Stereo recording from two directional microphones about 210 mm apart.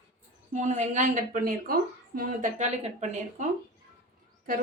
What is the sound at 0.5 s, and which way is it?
Speech, 35° right (ahead or behind).